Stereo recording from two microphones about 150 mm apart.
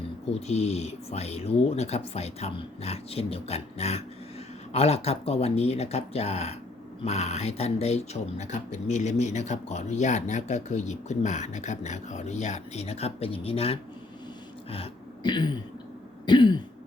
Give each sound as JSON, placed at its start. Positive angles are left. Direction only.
{"t": 0.3, "sound": "speech", "side_deg": 45}
{"t": 16.2, "sound": "throat clearing", "side_deg": 30}